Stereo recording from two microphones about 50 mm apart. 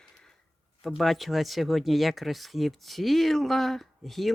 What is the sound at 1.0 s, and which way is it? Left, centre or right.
Speech, centre.